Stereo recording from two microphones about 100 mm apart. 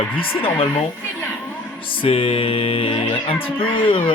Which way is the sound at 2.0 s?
65° left (ahead or behind).